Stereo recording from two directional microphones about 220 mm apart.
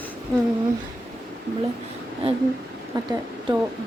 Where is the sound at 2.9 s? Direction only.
20° right (ahead or behind).